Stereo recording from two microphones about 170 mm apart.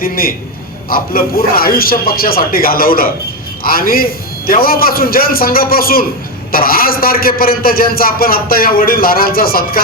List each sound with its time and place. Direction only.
0.0 s a man's voice: 60° left (ahead or behind)